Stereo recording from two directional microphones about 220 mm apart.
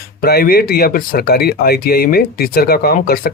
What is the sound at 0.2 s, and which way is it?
Speech, 45° left (ahead or behind).